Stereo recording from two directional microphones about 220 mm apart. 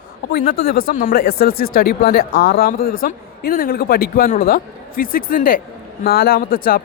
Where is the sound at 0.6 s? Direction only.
40° left (ahead or behind).